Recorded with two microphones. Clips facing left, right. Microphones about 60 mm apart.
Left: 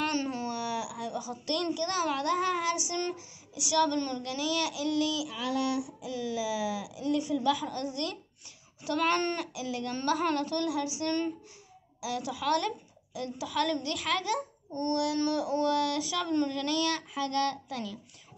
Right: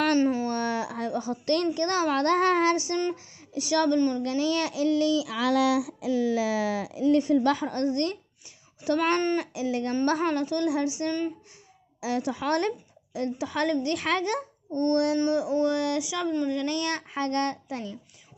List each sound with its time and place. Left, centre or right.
0.2 s speech: right
0.5 s a woman's voice: right
3.9 s speech: right
4.2 s speech: right
5.3 s a sound: right
6.1 s speech: right
6.4 s speech: right
7.1 s a child's voice: right
11.1 s speech: centre
12.0 s a woman's voice: right
15.1 s speech: right
16.5 s a child's voice: right